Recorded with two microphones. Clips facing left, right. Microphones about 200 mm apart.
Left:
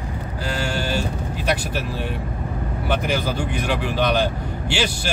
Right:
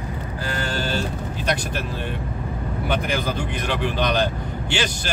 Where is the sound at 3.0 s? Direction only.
5° left (ahead or behind).